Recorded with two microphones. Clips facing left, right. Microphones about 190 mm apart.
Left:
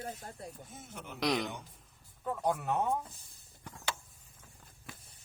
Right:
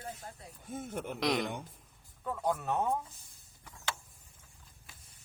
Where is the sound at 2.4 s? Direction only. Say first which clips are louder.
Even; 15° left (ahead or behind).